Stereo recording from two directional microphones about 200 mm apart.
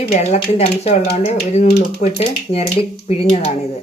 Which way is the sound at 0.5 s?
30° left (ahead or behind).